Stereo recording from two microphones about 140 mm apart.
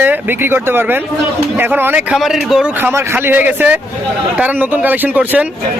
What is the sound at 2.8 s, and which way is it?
Speech, 15° right (ahead or behind).